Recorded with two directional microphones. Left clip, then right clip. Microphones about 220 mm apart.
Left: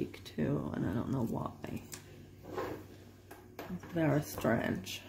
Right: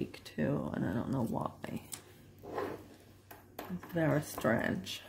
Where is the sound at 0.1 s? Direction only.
15° right (ahead or behind).